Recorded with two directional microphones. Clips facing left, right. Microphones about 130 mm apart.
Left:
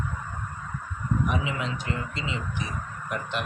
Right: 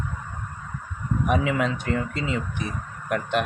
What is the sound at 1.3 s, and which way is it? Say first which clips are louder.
Speech: right 6 dB; 60° right (ahead or behind).